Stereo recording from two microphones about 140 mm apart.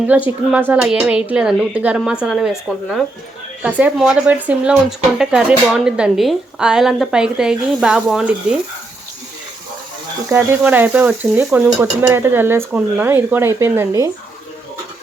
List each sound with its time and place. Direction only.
0.1 s speech: 10° right (ahead or behind)
10.2 s speech: 15° right (ahead or behind)